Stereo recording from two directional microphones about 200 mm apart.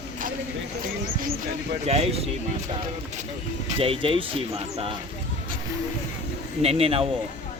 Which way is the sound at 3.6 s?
30° right (ahead or behind).